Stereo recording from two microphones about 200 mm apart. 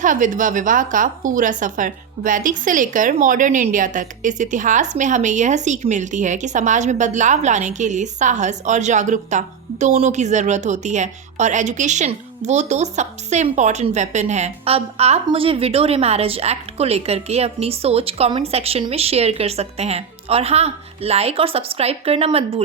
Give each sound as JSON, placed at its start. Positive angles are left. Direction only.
{"t": 0.0, "sound": "a woman's voice", "side_deg": -40}